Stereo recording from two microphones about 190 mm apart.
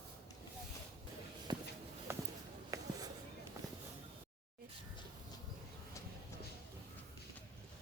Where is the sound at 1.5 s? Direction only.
20° right (ahead or behind).